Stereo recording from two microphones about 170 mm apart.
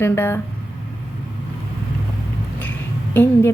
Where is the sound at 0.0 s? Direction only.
15° left (ahead or behind).